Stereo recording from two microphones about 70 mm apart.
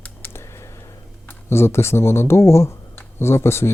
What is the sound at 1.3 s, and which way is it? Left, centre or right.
Speech, left.